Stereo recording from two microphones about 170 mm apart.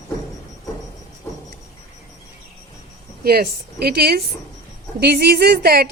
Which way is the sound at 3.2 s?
65° right (ahead or behind).